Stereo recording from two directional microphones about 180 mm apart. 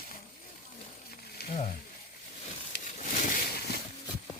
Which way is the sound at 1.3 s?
60° left (ahead or behind).